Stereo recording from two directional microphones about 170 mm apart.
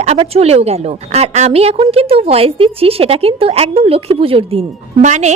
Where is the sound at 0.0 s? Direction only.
40° right (ahead or behind).